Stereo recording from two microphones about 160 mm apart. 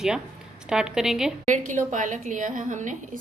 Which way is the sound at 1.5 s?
50° right (ahead or behind).